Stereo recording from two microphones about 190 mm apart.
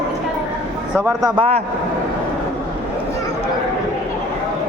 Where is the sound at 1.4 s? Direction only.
30° right (ahead or behind).